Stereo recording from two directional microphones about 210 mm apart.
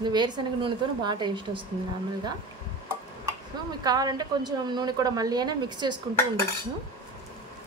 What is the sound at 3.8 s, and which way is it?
A woman's voice, 20° right (ahead or behind).